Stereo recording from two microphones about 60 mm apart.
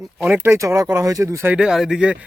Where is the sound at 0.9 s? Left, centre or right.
Right.